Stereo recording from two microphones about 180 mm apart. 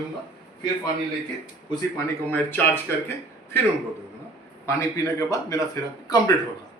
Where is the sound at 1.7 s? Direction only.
15° left (ahead or behind).